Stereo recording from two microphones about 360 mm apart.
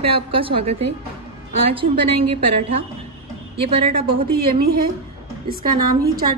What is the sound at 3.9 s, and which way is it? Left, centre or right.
Speech, right.